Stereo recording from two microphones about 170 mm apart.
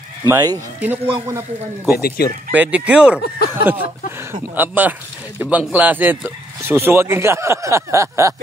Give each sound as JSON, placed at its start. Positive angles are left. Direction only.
{"t": 0.3, "sound": "speech", "side_deg": -20}
{"t": 2.0, "sound": "speech", "side_deg": 65}
{"t": 2.5, "sound": "speech", "side_deg": -10}
{"t": 3.2, "sound": "speech", "side_deg": 70}
{"t": 3.6, "sound": "speech", "side_deg": -15}